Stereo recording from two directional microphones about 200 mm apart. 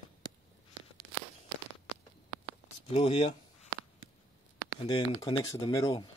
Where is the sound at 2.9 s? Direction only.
30° left (ahead or behind).